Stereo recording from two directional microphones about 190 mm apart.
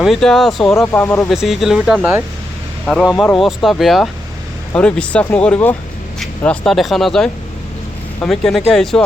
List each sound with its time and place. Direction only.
0.0 s speech: centre (ahead or behind)
1.0 s speech: 15° left (ahead or behind)
1.3 s speech: centre (ahead or behind)
2.8 s speech: centre (ahead or behind)